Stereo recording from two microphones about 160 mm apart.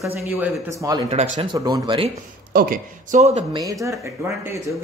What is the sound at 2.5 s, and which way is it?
Speech, 65° right (ahead or behind).